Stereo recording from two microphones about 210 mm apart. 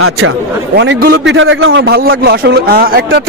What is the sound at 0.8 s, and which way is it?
A man's voice, 55° right (ahead or behind).